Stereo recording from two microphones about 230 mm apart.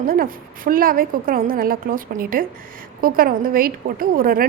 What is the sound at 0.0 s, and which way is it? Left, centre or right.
A woman's voice, right.